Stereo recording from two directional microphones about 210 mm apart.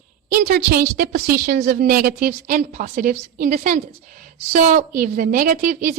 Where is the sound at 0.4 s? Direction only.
45° right (ahead or behind).